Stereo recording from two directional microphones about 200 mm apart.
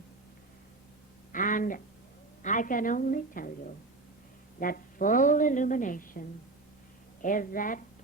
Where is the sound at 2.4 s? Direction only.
40° left (ahead or behind).